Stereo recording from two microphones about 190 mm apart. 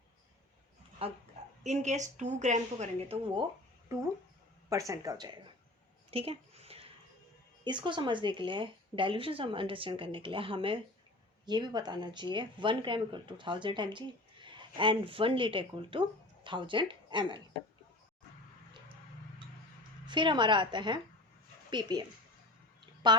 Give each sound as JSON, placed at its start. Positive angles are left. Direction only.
{"t": 1.0, "sound": "a woman's voice", "side_deg": -30}
{"t": 4.7, "sound": "speech", "side_deg": -15}
{"t": 6.1, "sound": "a sound", "side_deg": -30}
{"t": 7.6, "sound": "speech", "side_deg": -25}
{"t": 20.1, "sound": "speech", "side_deg": -25}
{"t": 23.0, "sound": "speech", "side_deg": -25}